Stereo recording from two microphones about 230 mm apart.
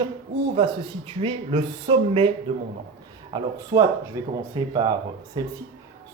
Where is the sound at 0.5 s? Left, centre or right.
Right.